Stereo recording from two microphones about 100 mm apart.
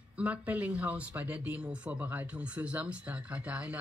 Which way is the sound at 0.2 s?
15° right (ahead or behind).